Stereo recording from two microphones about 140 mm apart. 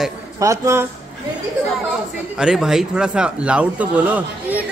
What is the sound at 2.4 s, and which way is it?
A woman's voice, 5° right (ahead or behind).